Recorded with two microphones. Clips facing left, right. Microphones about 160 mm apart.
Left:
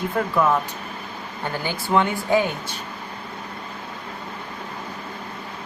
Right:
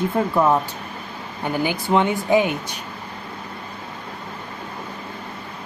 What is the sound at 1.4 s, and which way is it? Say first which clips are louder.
Speech: right 5 dB; 15° right (ahead or behind).